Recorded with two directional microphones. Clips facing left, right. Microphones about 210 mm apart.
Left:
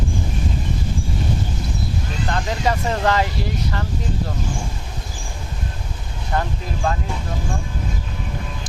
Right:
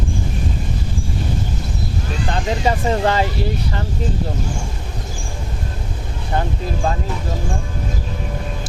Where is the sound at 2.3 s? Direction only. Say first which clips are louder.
Right 2 dB; 25° right (ahead or behind).